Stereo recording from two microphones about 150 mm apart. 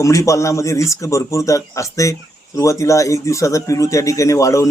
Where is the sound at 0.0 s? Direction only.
20° left (ahead or behind).